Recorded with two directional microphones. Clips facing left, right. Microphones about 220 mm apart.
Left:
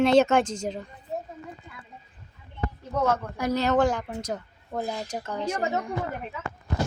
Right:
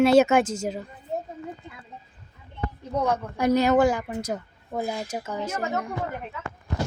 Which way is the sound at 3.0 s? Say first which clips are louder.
Right 4 dB; 15° right (ahead or behind).